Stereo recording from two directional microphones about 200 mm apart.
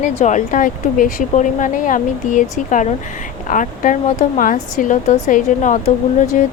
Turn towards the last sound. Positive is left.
turn(degrees=40)  # may be behind; listen again after turning